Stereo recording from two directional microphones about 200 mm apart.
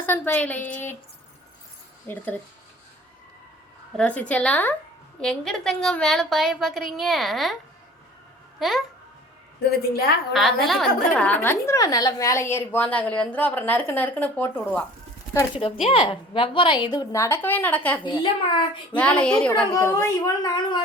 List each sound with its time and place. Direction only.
0.0 s a woman's voice: 10° left (ahead or behind)
2.0 s a woman's voice: 10° left (ahead or behind)
3.9 s a woman's voice: 5° left (ahead or behind)
8.5 s speech: centre (ahead or behind)
9.6 s a woman's voice: 50° left (ahead or behind)
10.3 s a woman's voice: centre (ahead or behind)
15.6 s a woman's voice: 25° left (ahead or behind); by 18.0 s 10° left (ahead or behind)
18.0 s a woman's voice: 25° left (ahead or behind)
18.9 s a woman's voice: 5° left (ahead or behind)
19.7 s a woman's voice: 15° left (ahead or behind)